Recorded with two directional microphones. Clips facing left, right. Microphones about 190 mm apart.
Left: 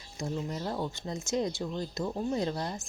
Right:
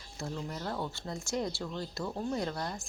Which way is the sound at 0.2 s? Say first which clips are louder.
Left 4 dB; 20° left (ahead or behind).